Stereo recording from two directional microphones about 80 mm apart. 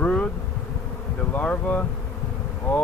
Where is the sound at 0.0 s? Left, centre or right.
Centre.